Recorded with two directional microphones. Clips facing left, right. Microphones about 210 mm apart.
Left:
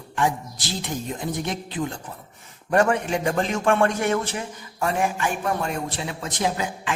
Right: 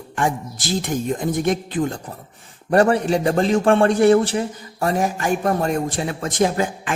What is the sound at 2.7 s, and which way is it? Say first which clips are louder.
A man's voice: right 5 dB; 35° right (ahead or behind).